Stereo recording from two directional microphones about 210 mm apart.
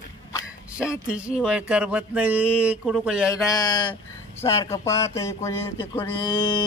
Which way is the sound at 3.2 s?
15° left (ahead or behind).